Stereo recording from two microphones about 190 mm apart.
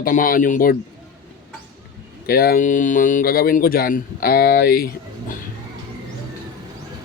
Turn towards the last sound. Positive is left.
turn(degrees=50)  # may be behind; listen again after turning